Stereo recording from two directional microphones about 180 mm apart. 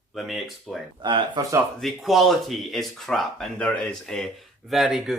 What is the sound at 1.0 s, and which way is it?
Speech, 25° right (ahead or behind).